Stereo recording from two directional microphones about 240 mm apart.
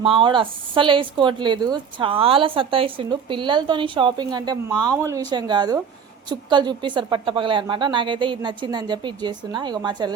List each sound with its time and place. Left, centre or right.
0.0 s speech: right